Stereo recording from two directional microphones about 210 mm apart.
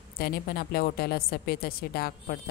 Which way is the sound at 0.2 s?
45° left (ahead or behind).